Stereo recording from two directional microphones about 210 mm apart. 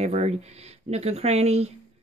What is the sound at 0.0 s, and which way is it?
Speech, 30° right (ahead or behind).